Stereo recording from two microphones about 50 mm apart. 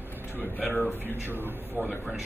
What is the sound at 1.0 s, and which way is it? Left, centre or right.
Speech, right.